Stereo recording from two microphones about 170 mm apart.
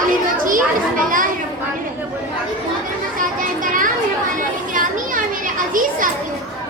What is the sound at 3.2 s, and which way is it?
Children playing, 50° right (ahead or behind).